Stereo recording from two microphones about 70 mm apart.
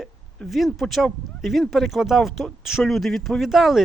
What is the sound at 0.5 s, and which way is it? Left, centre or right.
Speech, centre.